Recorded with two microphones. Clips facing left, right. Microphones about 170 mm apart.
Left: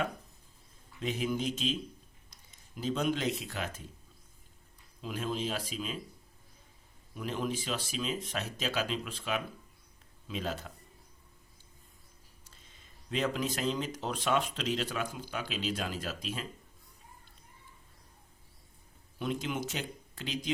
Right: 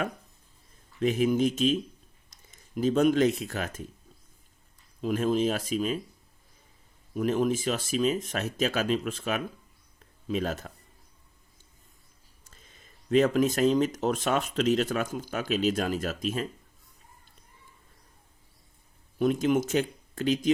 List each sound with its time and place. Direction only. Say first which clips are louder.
1.0 s speech: right 9 dB; 50° right (ahead or behind)
4.9 s speech: right 10 dB; 50° right (ahead or behind)
7.1 s speech: right 9 dB; 50° right (ahead or behind)
12.8 s speech: right 10 dB; 50° right (ahead or behind)
19.2 s speech: right 10 dB; 45° right (ahead or behind)